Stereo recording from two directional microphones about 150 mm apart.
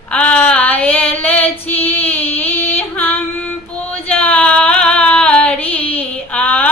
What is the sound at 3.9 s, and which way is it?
Female singing, 10° left (ahead or behind).